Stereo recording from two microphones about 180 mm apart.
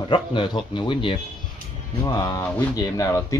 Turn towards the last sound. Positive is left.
turn(degrees=20)  # may be behind; listen again after turning